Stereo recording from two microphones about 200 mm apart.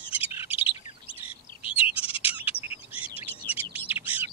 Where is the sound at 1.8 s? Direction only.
5° right (ahead or behind).